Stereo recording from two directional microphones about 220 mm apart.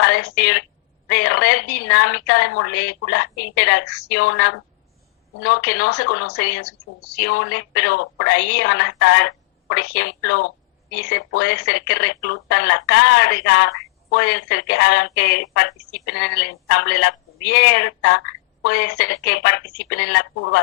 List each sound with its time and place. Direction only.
0.1 s a woman's voice: 50° left (ahead or behind)
2.5 s speech: 70° left (ahead or behind)
2.7 s a woman's voice: 50° left (ahead or behind)
3.8 s speech: 90° left
4.1 s a woman's voice: 50° left (ahead or behind)